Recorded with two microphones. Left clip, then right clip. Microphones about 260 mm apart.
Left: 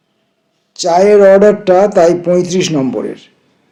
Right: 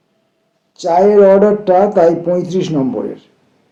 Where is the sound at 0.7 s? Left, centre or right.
Left.